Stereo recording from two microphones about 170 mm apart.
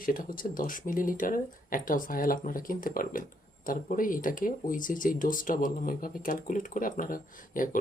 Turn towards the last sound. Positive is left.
turn(degrees=55)  # may be behind; listen again after turning